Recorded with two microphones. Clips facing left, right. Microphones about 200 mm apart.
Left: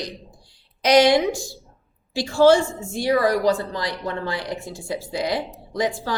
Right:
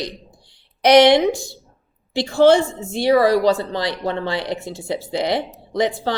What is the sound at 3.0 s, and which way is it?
Speech, 30° right (ahead or behind).